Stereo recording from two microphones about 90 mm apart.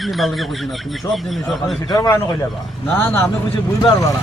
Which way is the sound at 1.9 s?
40° left (ahead or behind).